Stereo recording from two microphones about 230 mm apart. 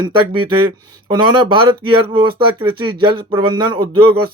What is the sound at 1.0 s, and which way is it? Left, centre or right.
Speech, centre.